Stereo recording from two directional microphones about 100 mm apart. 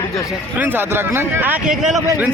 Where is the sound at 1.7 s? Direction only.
5° right (ahead or behind).